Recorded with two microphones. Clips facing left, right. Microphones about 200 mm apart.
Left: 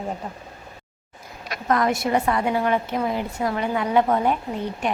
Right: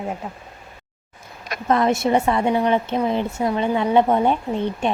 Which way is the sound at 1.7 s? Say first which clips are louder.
Right 3 dB; 25° right (ahead or behind).